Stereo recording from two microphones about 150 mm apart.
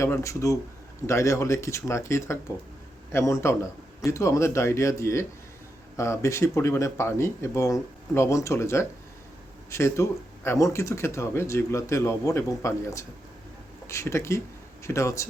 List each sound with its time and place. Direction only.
0.0 s speech: 20° left (ahead or behind)